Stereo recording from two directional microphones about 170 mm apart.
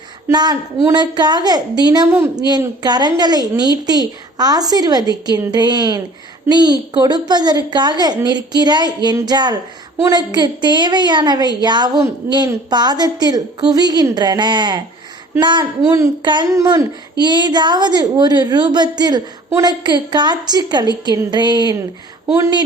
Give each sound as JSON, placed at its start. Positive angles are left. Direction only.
{"t": 0.3, "sound": "a woman's voice", "side_deg": -25}
{"t": 2.8, "sound": "a woman's voice", "side_deg": -25}